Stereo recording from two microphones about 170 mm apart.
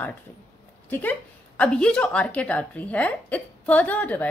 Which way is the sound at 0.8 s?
10° left (ahead or behind).